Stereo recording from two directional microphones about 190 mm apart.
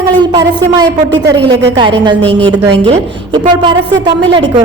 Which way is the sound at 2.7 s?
30° right (ahead or behind).